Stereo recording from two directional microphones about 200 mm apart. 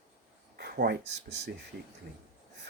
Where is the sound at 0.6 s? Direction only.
50° right (ahead or behind).